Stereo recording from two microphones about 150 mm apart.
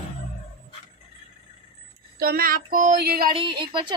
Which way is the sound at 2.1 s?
80° right.